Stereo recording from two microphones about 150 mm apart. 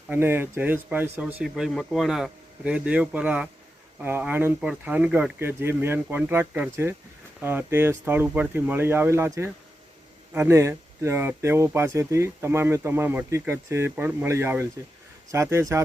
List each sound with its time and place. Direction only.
0.1 s speech: 15° right (ahead or behind)
1.4 s speech: 5° right (ahead or behind)